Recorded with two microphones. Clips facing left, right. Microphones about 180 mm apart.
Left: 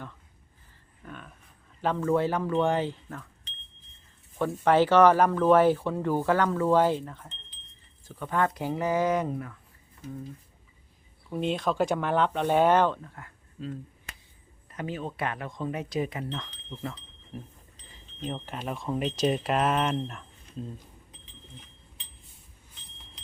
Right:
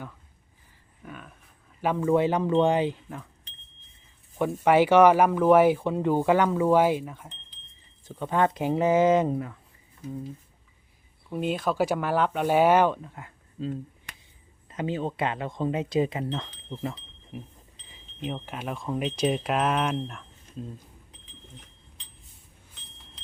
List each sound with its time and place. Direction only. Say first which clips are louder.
1.0 s a sound: right 1 dB; 5° right (ahead or behind)
1.8 s speech: right 2 dB; 10° right (ahead or behind)
4.4 s speech: right 2 dB; 15° right (ahead or behind)
8.0 s speech: right 3 dB; 20° right (ahead or behind)
11.3 s speech: right 1 dB; 5° right (ahead or behind); by 13.7 s 20° right (ahead or behind)
14.7 s speech: right 5 dB; 25° right (ahead or behind)
17.3 s speech: right 1 dB; 5° right (ahead or behind)